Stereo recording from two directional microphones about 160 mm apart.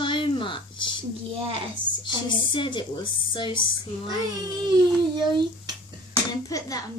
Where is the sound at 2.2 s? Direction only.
30° left (ahead or behind).